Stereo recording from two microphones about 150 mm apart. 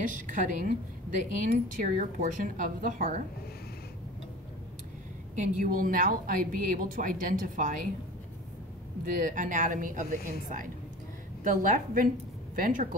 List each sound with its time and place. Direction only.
0.0 s a woman's voice: 60° right (ahead or behind)
5.4 s a woman's voice: 65° right (ahead or behind)
9.0 s a woman's voice: 60° right (ahead or behind)
11.4 s a woman's voice: 60° right (ahead or behind)